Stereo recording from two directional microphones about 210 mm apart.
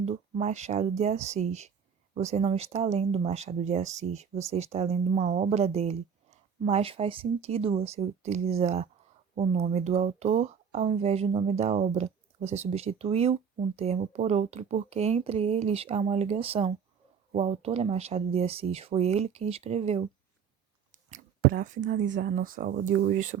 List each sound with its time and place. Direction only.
0.0 s speech: 35° right (ahead or behind)
21.1 s speech: 40° right (ahead or behind)